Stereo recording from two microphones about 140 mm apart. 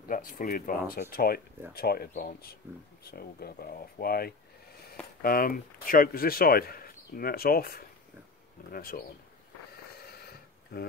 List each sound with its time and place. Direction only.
0.1 s speech: 80° left
10.7 s speech: 90° left